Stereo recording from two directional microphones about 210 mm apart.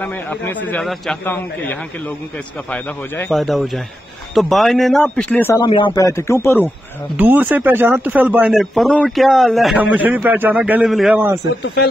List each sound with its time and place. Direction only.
0.0 s a man's voice: 5° left (ahead or behind)
5.7 s a man's voice: 25° left (ahead or behind)
7.2 s speech: 10° right (ahead or behind)
11.6 s speech: 55° left (ahead or behind)